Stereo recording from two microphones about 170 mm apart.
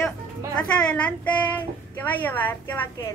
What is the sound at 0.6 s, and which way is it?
Speech, 5° left (ahead or behind).